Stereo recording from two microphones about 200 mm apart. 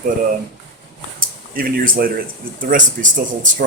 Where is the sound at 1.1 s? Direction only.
45° right (ahead or behind).